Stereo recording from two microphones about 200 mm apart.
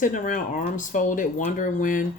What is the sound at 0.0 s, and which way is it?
Speech, 40° left (ahead or behind).